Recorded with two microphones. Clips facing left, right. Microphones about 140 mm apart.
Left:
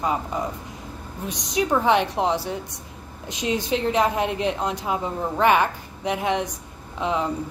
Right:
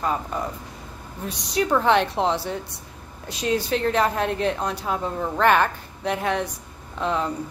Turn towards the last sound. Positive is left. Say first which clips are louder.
# even
turn(degrees=15)  # may be behind; listen again after turning